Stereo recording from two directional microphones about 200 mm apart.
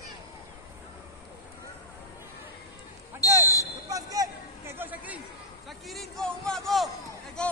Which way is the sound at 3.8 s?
15° right (ahead or behind).